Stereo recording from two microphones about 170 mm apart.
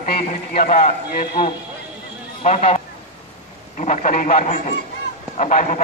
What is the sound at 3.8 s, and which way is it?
A man's voice, 50° left (ahead or behind).